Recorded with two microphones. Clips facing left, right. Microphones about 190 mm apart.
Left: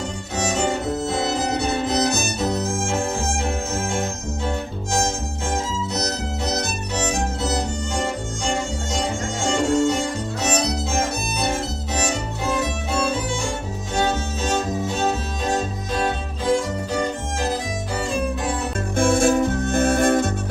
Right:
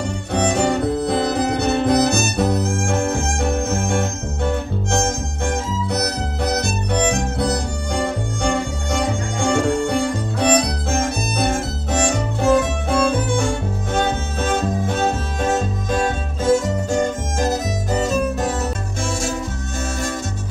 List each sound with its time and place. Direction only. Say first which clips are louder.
0.3 s music: right 5 dB; 60° right (ahead or behind)
5.9 s music: right 3 dB; 60° right (ahead or behind)
8.9 s music: right 4 dB; 60° right (ahead or behind)
10.4 s violin: right 5 dB; 55° right (ahead or behind)
12.5 s music: right 5 dB; 50° right (ahead or behind)
18.9 s music: left 10 dB; 55° left (ahead or behind)